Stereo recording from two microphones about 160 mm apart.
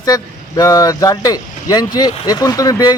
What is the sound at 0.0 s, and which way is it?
A man's voice, 25° left (ahead or behind).